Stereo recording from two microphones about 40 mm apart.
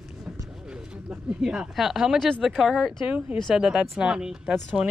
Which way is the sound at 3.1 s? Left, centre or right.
Right.